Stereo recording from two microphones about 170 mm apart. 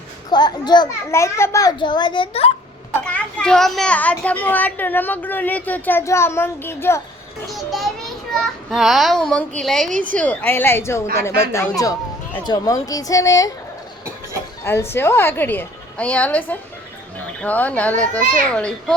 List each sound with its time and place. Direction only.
0.3 s a child's voice: 25° left (ahead or behind)
3.0 s a woman's voice: 5° left (ahead or behind)
7.4 s a child's voice: centre (ahead or behind); by 13.5 s 20° left (ahead or behind)
14.6 s a woman's voice: 15° left (ahead or behind)